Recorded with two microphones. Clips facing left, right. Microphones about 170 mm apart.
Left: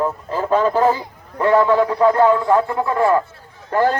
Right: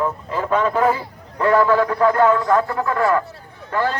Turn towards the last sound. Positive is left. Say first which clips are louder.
# left 4 dB
turn(degrees=45)  # may be behind; listen again after turning